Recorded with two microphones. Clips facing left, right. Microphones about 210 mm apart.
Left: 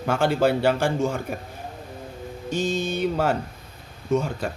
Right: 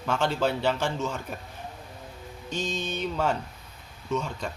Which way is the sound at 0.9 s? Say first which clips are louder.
Left 7 dB; 50° left (ahead or behind).